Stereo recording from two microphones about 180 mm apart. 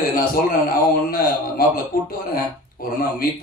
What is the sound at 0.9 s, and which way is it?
A man's voice, 55° left (ahead or behind).